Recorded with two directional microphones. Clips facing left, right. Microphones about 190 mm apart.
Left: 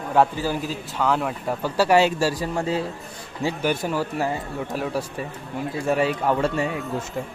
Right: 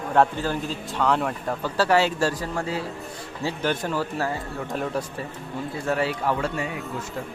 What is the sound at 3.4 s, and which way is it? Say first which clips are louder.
A man's voice: left 2 dB; 10° left (ahead or behind).